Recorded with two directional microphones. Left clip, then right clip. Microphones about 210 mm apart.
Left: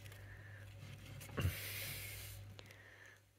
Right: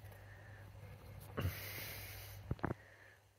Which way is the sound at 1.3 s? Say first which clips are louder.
Left 1 dB; 20° left (ahead or behind).